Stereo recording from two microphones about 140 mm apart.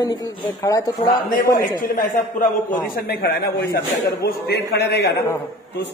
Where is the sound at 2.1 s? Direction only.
70° left (ahead or behind); by 3.3 s 90° left.